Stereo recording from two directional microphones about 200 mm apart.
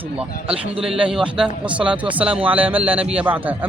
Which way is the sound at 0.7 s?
5° right (ahead or behind).